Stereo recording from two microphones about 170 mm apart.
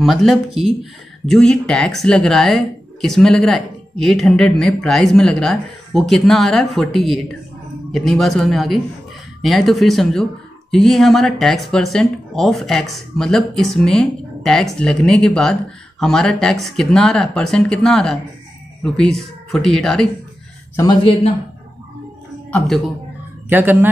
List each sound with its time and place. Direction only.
0.0 s speech: centre (ahead or behind)
20.7 s speech: 25° left (ahead or behind)
23.5 s speech: 10° right (ahead or behind)